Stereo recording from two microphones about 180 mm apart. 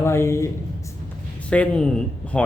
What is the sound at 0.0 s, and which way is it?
Speech, 15° left (ahead or behind).